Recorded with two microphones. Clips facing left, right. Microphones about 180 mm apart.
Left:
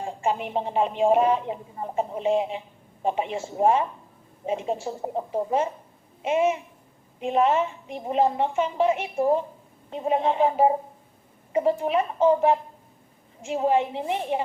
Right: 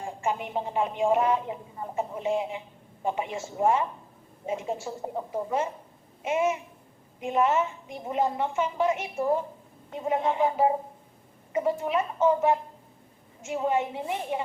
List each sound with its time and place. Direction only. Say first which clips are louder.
0.0 s a woman's voice: left 3 dB; 20° left (ahead or behind)